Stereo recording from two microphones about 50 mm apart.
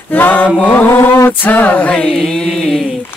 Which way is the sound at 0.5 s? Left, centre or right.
Left.